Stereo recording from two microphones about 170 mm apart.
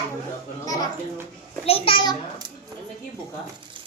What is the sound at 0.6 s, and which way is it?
Speech, 20° left (ahead or behind).